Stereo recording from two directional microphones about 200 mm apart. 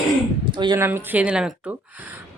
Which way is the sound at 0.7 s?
10° right (ahead or behind).